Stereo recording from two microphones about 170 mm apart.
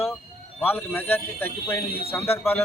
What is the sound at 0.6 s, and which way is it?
A man's voice, 10° left (ahead or behind).